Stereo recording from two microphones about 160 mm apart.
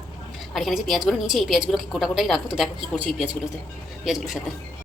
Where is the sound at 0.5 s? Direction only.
Centre (ahead or behind).